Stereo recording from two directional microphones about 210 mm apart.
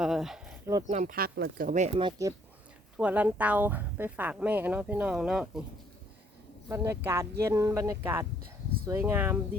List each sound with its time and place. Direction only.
0.0 s a sound: centre (ahead or behind)
0.9 s speech: 35° right (ahead or behind)
2.0 s speech: 20° right (ahead or behind)
3.0 s speech: 5° right (ahead or behind)
6.7 s speech: 15° right (ahead or behind)